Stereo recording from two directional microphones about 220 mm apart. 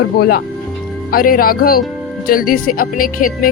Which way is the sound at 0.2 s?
45° left (ahead or behind).